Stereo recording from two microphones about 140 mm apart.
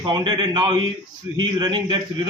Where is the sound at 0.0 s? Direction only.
30° right (ahead or behind).